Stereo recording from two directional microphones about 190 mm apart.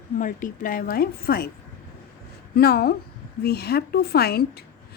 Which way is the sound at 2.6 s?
55° left (ahead or behind).